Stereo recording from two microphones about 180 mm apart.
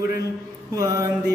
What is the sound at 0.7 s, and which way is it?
Mantra, 20° right (ahead or behind).